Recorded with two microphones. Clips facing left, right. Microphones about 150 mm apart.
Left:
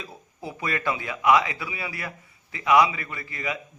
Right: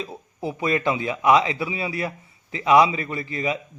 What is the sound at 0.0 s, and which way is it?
A man's voice, 25° right (ahead or behind).